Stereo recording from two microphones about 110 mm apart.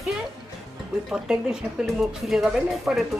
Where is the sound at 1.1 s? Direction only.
5° right (ahead or behind).